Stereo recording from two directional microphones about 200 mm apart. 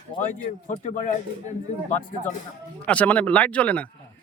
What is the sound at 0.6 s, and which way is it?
Speech, 35° left (ahead or behind).